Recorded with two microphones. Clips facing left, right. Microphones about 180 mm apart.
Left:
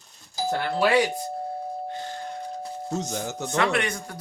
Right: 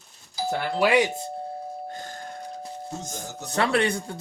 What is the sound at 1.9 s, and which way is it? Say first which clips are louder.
Doorbell: left 3 dB; 45° right (ahead or behind).